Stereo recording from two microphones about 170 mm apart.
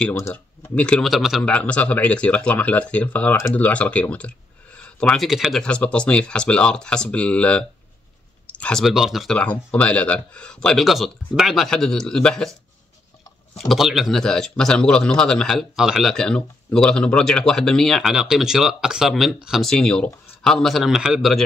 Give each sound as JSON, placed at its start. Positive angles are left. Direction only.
{"t": 0.1, "sound": "speech", "side_deg": 15}
{"t": 13.6, "sound": "speech", "side_deg": 0}